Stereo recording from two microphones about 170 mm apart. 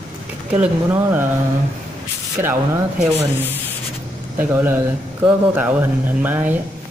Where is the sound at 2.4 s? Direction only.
15° right (ahead or behind).